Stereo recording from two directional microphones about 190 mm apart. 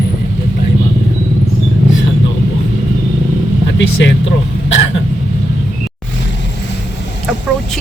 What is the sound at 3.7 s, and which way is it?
Speech, 65° left (ahead or behind).